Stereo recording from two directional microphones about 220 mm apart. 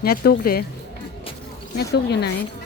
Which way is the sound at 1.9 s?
50° left (ahead or behind).